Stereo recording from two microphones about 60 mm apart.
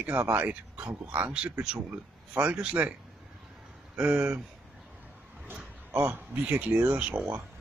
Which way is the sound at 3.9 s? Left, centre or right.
Right.